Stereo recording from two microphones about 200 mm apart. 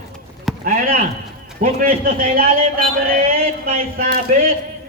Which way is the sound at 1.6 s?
45° right (ahead or behind).